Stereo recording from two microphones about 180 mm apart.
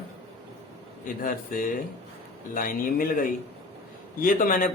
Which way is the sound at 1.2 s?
50° left (ahead or behind).